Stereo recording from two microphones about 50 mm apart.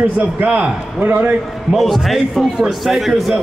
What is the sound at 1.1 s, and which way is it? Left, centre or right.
Speech, right.